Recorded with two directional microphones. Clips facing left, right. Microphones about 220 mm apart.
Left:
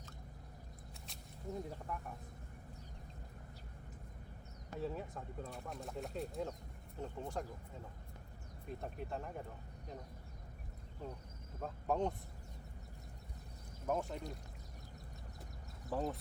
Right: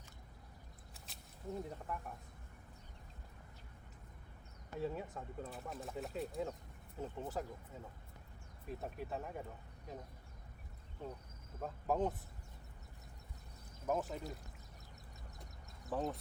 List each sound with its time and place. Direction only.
1.9 s speech: centre (ahead or behind)
4.8 s speech: centre (ahead or behind)
8.6 s speech: 5° right (ahead or behind)
11.0 s speech: centre (ahead or behind)
13.8 s speech: centre (ahead or behind)
15.9 s speech: centre (ahead or behind)